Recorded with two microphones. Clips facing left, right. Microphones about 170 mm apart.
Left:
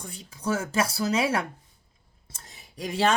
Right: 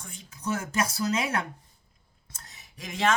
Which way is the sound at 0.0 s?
35° left (ahead or behind).